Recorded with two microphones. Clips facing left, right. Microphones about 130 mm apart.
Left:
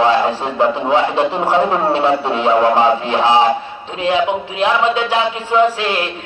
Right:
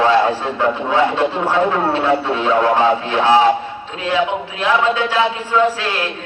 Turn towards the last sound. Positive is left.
turn(degrees=20)  # may be behind; listen again after turning